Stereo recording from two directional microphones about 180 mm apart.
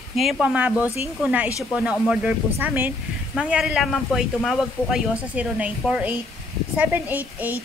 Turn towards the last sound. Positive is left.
turn(degrees=-10)  # may be behind; listen again after turning